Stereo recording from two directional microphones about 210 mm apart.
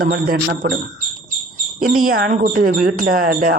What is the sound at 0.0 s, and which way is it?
Speech, 45° right (ahead or behind).